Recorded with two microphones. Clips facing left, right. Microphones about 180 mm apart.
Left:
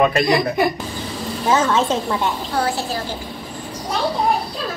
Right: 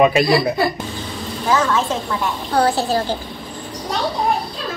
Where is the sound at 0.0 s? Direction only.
5° right (ahead or behind).